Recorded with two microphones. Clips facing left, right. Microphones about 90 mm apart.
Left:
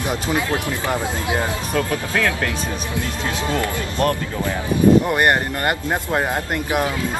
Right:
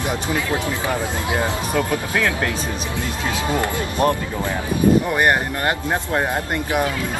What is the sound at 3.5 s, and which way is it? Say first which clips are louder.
Speech: right 1 dB; 20° right (ahead or behind).